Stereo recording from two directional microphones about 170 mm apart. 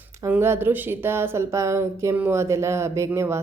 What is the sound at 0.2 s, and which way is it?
A woman's voice, 15° right (ahead or behind).